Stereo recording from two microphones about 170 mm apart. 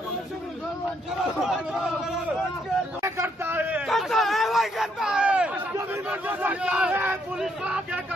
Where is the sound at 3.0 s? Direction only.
15° right (ahead or behind).